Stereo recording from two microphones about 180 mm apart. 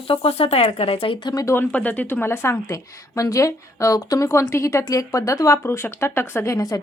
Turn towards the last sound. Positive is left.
turn(degrees=20)  # may be behind; listen again after turning